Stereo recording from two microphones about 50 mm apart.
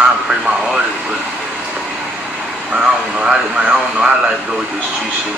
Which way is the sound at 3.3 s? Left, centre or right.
Centre.